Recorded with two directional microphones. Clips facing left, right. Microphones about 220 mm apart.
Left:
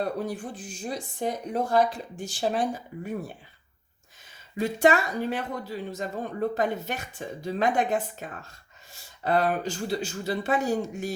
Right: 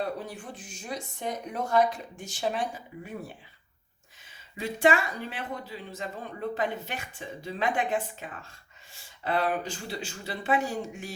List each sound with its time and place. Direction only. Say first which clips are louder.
0.2 s speech: left 7 dB; 40° left (ahead or behind)
4.6 s speech: left 3 dB; 40° left (ahead or behind)